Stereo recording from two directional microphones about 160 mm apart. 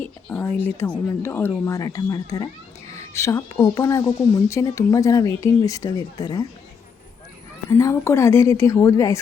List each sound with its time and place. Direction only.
0.0 s speech: 10° left (ahead or behind)
7.7 s speech: 20° left (ahead or behind)